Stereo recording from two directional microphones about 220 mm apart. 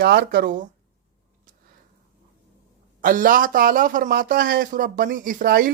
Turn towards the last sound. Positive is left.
turn(degrees=-40)  # may be behind; listen again after turning